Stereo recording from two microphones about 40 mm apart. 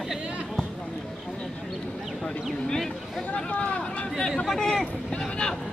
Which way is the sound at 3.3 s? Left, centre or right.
Left.